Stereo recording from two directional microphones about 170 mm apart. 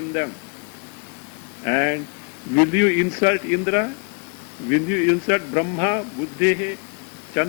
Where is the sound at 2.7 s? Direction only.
10° left (ahead or behind).